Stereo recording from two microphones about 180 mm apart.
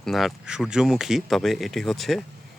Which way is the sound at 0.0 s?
Centre (ahead or behind).